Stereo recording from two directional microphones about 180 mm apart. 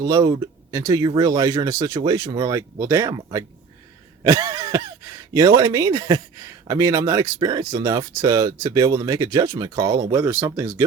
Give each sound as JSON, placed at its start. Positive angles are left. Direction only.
{"t": 0.0, "sound": "speech", "side_deg": -20}